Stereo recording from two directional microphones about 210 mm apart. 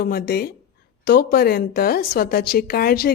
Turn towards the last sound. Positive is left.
turn(degrees=45)  # may be behind; listen again after turning